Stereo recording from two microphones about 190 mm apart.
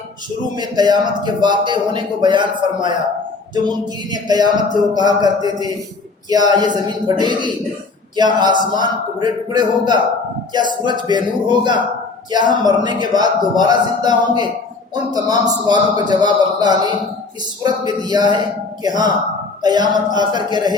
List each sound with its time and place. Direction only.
0.5 s a man's voice: 20° right (ahead or behind)